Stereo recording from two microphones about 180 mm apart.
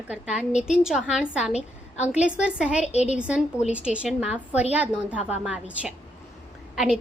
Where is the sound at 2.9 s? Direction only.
35° left (ahead or behind).